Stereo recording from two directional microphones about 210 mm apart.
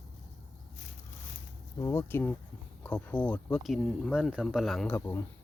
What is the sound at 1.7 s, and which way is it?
Speech, 15° left (ahead or behind).